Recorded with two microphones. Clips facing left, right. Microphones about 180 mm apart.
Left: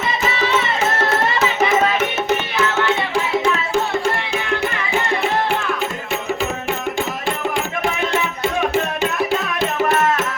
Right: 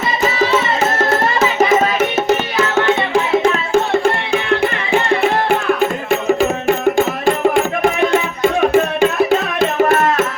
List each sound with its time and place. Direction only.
3.7 s music: 50° right (ahead or behind)
5.5 s music: 50° right (ahead or behind)